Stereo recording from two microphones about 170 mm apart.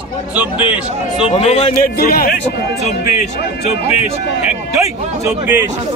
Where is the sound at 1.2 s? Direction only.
35° left (ahead or behind).